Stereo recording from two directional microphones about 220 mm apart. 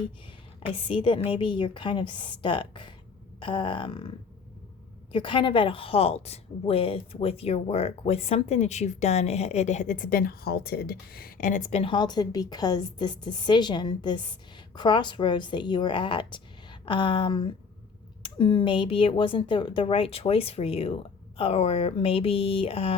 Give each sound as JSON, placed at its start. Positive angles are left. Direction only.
{"t": 0.9, "sound": "a woman's voice", "side_deg": 20}
{"t": 5.1, "sound": "a woman's voice", "side_deg": 20}